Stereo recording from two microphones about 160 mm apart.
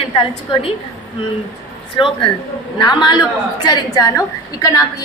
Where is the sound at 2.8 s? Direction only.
25° left (ahead or behind).